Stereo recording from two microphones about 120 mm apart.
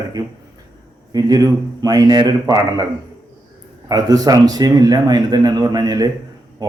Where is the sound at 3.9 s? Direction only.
30° right (ahead or behind).